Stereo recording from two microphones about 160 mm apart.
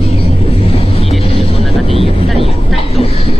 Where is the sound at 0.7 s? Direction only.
40° left (ahead or behind).